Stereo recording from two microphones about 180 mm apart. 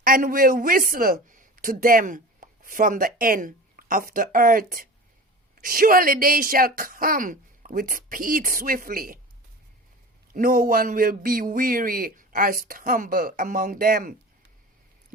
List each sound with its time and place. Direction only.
0.0 s a man's voice: 50° right (ahead or behind)
10.3 s speech: 50° right (ahead or behind)